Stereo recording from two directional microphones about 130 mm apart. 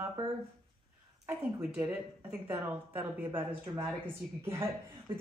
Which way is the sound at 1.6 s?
10° right (ahead or behind).